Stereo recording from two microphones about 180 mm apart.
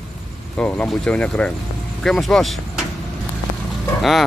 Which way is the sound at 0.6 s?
5° left (ahead or behind).